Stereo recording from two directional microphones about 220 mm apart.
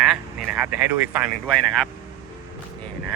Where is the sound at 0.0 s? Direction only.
5° right (ahead or behind).